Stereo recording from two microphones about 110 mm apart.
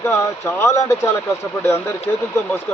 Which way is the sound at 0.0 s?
25° left (ahead or behind).